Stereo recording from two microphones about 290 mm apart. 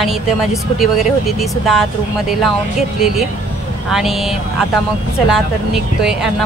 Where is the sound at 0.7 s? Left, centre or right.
Centre.